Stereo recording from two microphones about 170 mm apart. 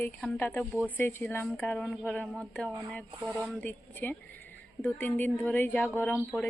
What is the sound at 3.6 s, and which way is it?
Speech, 10° left (ahead or behind).